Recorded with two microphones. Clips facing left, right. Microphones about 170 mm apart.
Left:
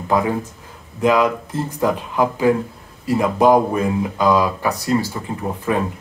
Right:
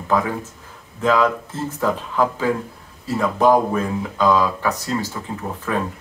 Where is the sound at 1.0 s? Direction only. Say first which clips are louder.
Left 2 dB; 15° left (ahead or behind).